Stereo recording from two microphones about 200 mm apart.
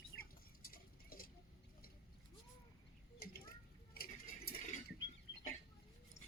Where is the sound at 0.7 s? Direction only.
45° left (ahead or behind).